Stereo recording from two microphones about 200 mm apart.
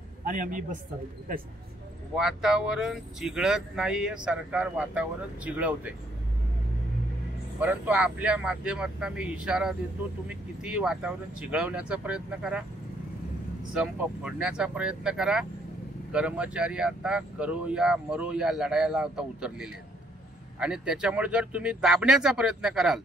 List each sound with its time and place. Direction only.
0.2 s a man's voice: 40° right (ahead or behind)
2.1 s speech: 5° right (ahead or behind)
7.6 s speech: 5° right (ahead or behind)
13.7 s speech: 5° right (ahead or behind)